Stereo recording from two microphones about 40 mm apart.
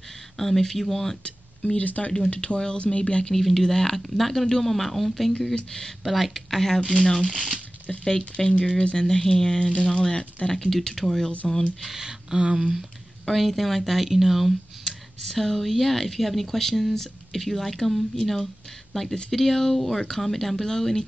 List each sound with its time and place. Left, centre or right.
0.4 s speech: centre
1.2 s a sound: left
1.8 s speech: left
3.3 s speech: centre
5.5 s speech: centre
6.0 s speech: centre
8.0 s speech: centre
12.0 s a sound: centre
12.5 s speech: centre
13.2 s speech: centre
14.0 s speech: centre
15.2 s speech: centre